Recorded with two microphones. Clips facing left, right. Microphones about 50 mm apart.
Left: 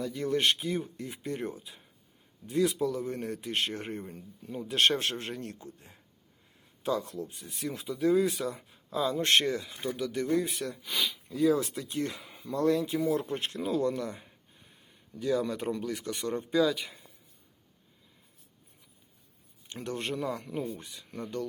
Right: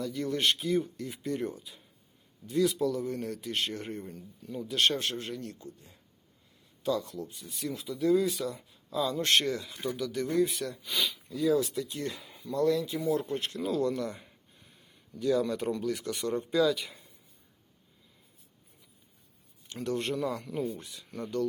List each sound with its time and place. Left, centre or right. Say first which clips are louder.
0.0 s speech: even; centre
0.3 s speech: left 1 dB; left
2.5 s speech: even; left
11.3 s speech: left 1 dB; left
13.7 s speech: left 1 dB; centre
19.8 s speech: right 2 dB; centre